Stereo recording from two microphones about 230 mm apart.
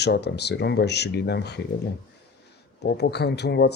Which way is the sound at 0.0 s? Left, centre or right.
Left.